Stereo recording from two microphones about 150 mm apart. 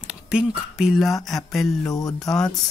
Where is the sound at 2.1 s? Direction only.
5° left (ahead or behind).